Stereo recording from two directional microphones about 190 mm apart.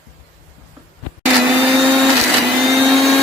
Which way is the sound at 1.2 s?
5° right (ahead or behind).